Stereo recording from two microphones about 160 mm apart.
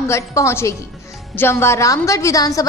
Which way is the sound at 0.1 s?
20° left (ahead or behind).